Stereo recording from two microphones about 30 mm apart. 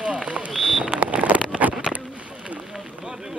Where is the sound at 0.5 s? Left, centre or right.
Centre.